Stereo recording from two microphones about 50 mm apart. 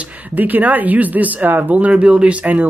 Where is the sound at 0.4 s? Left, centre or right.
Right.